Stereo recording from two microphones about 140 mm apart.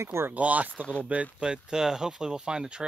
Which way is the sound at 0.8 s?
5° left (ahead or behind).